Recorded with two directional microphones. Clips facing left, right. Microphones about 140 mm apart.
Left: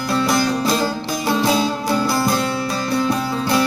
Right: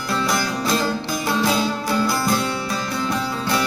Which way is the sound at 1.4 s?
20° left (ahead or behind).